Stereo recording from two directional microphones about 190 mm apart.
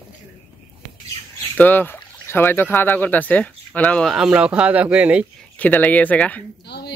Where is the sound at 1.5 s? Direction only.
10° left (ahead or behind); by 5.3 s 5° right (ahead or behind).